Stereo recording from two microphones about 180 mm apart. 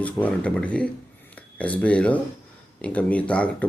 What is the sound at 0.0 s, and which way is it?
Speech, 10° left (ahead or behind).